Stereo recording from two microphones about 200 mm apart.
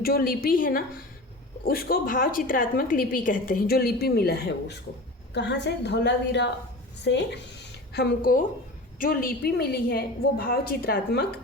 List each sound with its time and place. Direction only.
0.0 s a woman's voice: 50° left (ahead or behind)
7.9 s a woman's voice: 45° left (ahead or behind)